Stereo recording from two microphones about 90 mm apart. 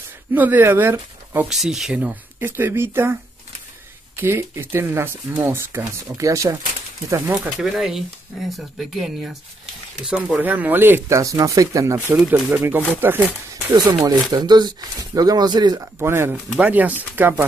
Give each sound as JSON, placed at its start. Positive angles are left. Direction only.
{"t": 0.3, "sound": "speech", "side_deg": -20}
{"t": 1.5, "sound": "speech", "side_deg": -5}
{"t": 2.0, "sound": "speech", "side_deg": -20}
{"t": 4.2, "sound": "speech", "side_deg": -25}
{"t": 7.5, "sound": "speech", "side_deg": -5}
{"t": 11.1, "sound": "speech", "side_deg": -35}
{"t": 12.1, "sound": "speech", "side_deg": -20}
{"t": 13.7, "sound": "speech", "side_deg": -45}
{"t": 15.8, "sound": "speech", "side_deg": -30}
{"t": 16.5, "sound": "speech", "side_deg": -15}